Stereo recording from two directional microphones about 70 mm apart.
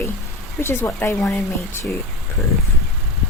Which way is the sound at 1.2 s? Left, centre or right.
Centre.